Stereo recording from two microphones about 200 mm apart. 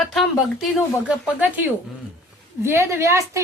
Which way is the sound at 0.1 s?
Centre (ahead or behind).